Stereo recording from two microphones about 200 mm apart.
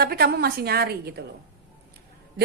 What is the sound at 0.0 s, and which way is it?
A woman's voice, 50° right (ahead or behind).